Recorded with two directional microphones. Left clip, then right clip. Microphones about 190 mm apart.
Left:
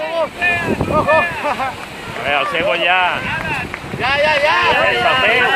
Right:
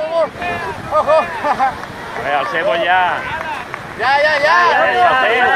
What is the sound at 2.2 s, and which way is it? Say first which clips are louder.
Speech: even; 45° left (ahead or behind).